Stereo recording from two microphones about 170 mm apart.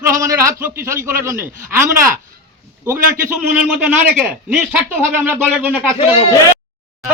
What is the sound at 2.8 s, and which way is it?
Speech, 15° right (ahead or behind).